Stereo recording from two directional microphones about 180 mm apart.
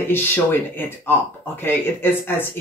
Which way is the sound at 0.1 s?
10° left (ahead or behind).